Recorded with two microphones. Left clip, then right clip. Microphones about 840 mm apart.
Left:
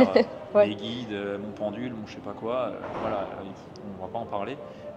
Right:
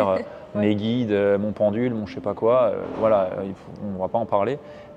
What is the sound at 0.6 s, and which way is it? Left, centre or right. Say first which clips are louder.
A man's voice: right 9 dB; right.